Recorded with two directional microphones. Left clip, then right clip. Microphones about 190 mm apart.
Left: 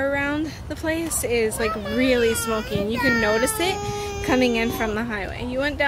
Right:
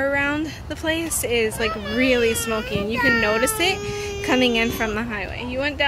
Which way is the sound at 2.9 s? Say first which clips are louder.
Right 2 dB; 60° left (ahead or behind).